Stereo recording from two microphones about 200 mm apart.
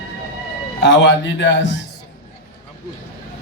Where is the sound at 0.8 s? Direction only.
65° left (ahead or behind).